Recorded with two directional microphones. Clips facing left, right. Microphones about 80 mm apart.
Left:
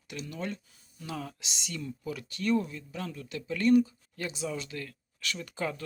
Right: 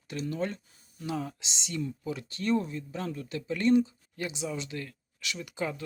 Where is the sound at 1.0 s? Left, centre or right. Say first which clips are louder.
Right 4 dB; right.